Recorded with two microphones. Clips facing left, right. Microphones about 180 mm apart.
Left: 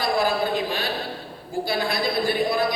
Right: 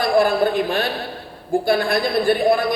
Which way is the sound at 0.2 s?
55° right (ahead or behind).